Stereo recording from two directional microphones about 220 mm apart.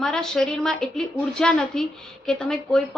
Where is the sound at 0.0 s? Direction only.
Centre (ahead or behind).